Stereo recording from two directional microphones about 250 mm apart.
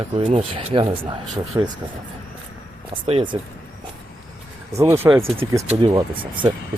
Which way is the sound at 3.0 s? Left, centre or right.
Right.